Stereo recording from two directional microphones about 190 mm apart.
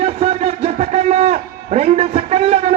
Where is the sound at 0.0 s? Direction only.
35° right (ahead or behind).